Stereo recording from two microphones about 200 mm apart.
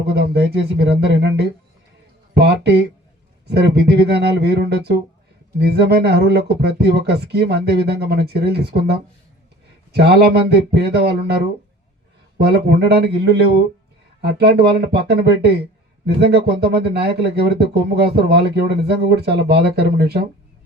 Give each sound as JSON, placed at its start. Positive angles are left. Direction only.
{"t": 0.0, "sound": "speech", "side_deg": -55}
{"t": 4.4, "sound": "speech", "side_deg": -55}
{"t": 9.9, "sound": "speech", "side_deg": -55}
{"t": 12.4, "sound": "speech", "side_deg": -55}